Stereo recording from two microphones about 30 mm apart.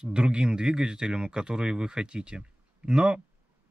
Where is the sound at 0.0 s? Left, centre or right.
Right.